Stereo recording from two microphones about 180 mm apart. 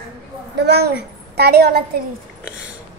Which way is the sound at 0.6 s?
65° right (ahead or behind).